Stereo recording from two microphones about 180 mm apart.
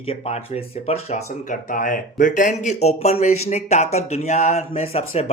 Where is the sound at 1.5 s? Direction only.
45° left (ahead or behind).